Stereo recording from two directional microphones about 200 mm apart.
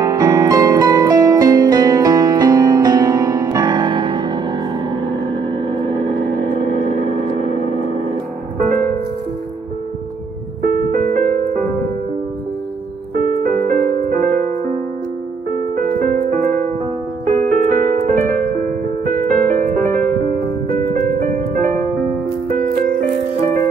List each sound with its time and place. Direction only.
0.0 s music: 15° right (ahead or behind)
6.5 s gong: 40° left (ahead or behind)
10.7 s music: 40° right (ahead or behind)
13.2 s music: 45° right (ahead or behind)
15.7 s music: 45° right (ahead or behind)
22.5 s music: 45° right (ahead or behind)